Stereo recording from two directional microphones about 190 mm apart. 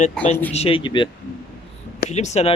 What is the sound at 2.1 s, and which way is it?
Speech, 35° left (ahead or behind).